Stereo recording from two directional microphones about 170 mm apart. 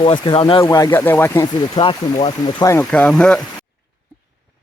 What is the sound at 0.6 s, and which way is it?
Speech, 20° left (ahead or behind).